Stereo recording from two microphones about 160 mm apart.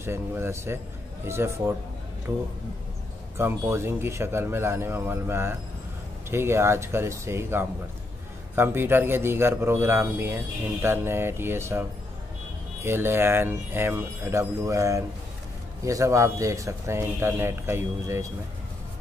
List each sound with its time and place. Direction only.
0.0 s a man's voice: 15° right (ahead or behind)
12.8 s a man's voice: 15° right (ahead or behind)